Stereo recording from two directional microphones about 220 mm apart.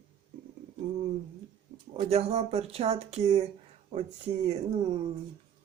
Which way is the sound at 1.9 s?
25° right (ahead or behind).